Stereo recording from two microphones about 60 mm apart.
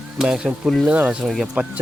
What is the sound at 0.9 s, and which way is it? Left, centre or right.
Speech, right.